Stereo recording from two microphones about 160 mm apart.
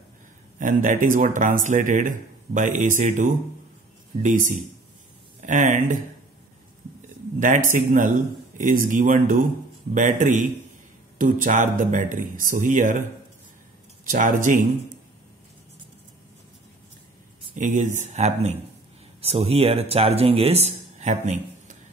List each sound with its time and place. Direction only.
0.6 s speech: 55° right (ahead or behind)
5.4 s speech: 50° right (ahead or behind)
7.3 s speech: 55° right (ahead or behind)
14.0 s speech: 55° right (ahead or behind)
17.6 s speech: 50° right (ahead or behind)